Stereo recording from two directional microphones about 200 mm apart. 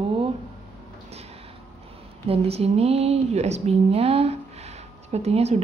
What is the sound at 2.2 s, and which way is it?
Speech, 30° right (ahead or behind).